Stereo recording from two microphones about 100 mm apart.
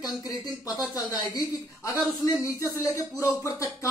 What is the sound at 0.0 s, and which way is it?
Speech, 40° left (ahead or behind).